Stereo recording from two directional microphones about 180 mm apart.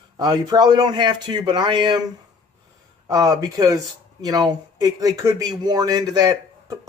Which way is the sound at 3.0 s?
20° right (ahead or behind).